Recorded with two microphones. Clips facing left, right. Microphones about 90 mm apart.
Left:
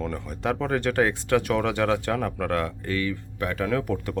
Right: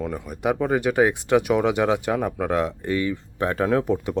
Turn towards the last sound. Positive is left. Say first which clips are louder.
# right 5 dB
turn(degrees=-20)  # may be behind; listen again after turning